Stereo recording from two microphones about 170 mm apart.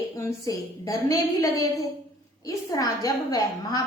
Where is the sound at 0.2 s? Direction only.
20° left (ahead or behind).